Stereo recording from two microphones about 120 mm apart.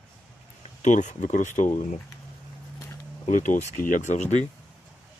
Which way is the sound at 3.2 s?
90° left.